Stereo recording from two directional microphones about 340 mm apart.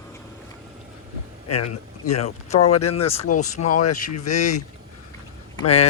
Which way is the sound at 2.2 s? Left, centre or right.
Centre.